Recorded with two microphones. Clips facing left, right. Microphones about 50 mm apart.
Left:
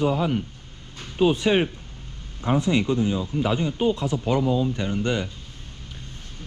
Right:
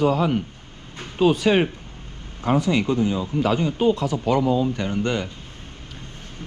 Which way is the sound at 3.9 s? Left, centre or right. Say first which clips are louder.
Right 3 dB; right.